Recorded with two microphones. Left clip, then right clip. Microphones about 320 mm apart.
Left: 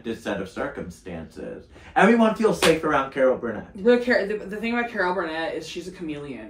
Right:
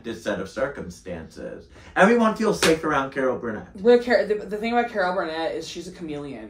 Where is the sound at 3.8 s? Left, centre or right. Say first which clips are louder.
Right 2 dB; centre.